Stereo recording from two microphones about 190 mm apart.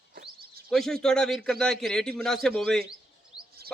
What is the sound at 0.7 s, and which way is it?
A man's voice, centre (ahead or behind).